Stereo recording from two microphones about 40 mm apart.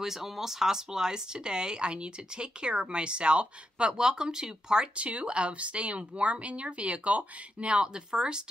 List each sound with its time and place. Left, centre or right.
0.0 s speech: centre
4.9 s speech: right